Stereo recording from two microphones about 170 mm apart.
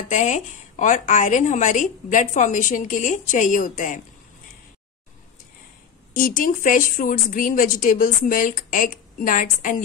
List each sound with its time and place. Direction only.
0.1 s a woman's voice: 45° left (ahead or behind)
6.1 s a woman's voice: 55° left (ahead or behind)